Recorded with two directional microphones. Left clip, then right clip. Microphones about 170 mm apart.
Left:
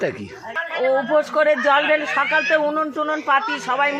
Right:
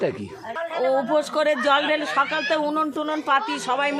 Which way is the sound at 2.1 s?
20° right (ahead or behind).